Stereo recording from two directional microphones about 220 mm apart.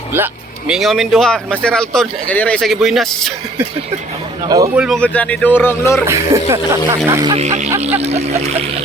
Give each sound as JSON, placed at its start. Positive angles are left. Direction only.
{"t": 0.7, "sound": "speech", "side_deg": 0}
{"t": 4.4, "sound": "speech", "side_deg": -15}
{"t": 4.7, "sound": "a man's voice", "side_deg": -5}
{"t": 6.1, "sound": "speech", "side_deg": -10}
{"t": 7.3, "sound": "speech", "side_deg": -30}